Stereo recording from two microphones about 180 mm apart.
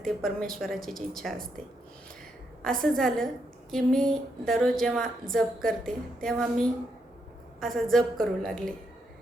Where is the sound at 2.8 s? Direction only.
5° left (ahead or behind).